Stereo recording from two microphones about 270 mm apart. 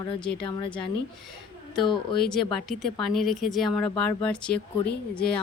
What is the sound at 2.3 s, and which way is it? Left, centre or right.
Speech, centre.